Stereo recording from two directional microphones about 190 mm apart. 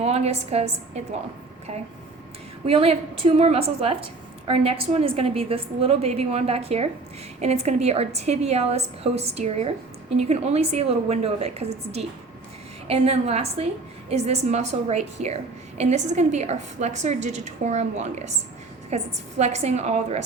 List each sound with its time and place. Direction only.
0.0 s a woman's voice: 35° right (ahead or behind)
2.6 s a woman's voice: 30° right (ahead or behind)